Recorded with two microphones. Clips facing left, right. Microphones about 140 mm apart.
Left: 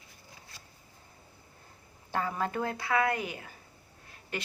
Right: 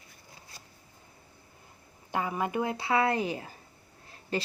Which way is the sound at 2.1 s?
10° right (ahead or behind).